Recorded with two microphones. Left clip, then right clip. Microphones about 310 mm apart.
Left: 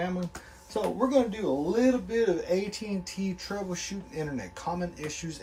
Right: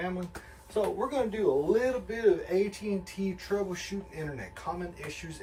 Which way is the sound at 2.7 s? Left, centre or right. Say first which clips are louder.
Right 1 dB; centre.